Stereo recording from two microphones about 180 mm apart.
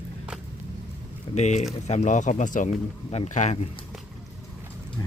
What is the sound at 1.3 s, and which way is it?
Speech, 40° left (ahead or behind).